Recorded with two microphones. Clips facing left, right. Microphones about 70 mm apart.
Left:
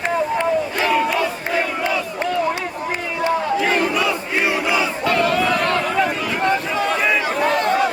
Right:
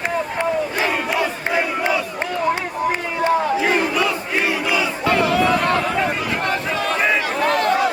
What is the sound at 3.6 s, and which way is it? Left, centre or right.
Battle cry, centre.